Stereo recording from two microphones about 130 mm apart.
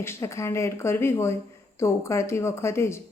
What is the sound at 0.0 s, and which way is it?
Speech, 20° left (ahead or behind).